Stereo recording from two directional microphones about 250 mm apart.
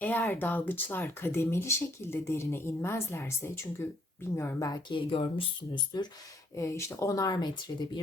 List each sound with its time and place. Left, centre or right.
0.0 s speech: centre